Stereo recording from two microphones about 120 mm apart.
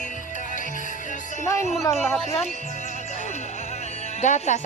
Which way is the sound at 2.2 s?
65° left (ahead or behind).